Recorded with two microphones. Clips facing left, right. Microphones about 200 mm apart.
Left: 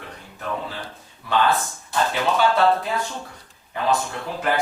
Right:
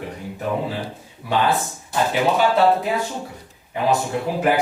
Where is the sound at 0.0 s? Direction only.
15° right (ahead or behind).